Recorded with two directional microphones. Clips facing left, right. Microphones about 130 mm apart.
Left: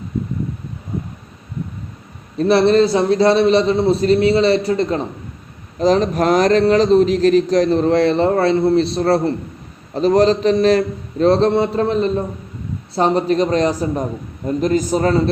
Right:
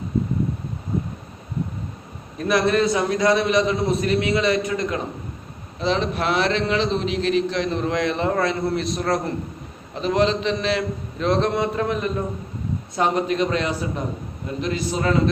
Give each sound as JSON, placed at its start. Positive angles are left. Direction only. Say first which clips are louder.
{"t": 2.4, "sound": "a man's voice", "louder": "left 7 dB", "side_deg": 30}